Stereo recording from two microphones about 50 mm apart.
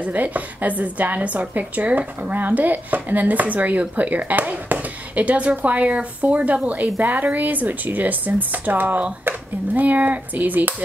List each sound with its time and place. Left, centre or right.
0.0 s speech: right